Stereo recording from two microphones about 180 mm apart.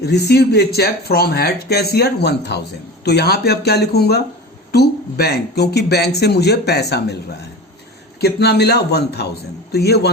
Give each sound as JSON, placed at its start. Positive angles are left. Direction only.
{"t": 0.0, "sound": "speech", "side_deg": 65}
{"t": 8.2, "sound": "speech", "side_deg": 65}